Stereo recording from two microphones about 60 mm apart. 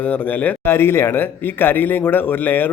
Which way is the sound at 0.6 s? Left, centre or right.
Left.